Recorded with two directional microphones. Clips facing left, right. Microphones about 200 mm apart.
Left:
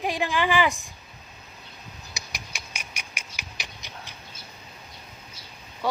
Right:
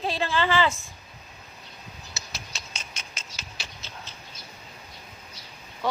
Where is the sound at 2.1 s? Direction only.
15° left (ahead or behind).